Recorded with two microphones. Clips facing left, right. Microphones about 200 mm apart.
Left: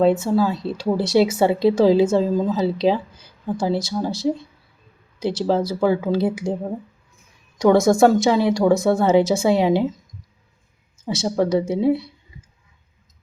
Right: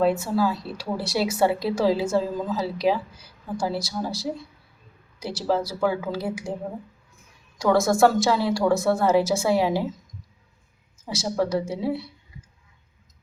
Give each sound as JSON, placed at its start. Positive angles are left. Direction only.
{"t": 0.0, "sound": "speech", "side_deg": 25}
{"t": 5.2, "sound": "speech", "side_deg": 25}
{"t": 7.6, "sound": "speech", "side_deg": 20}
{"t": 11.0, "sound": "speech", "side_deg": 25}